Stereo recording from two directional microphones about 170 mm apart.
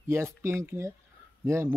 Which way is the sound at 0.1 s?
15° right (ahead or behind).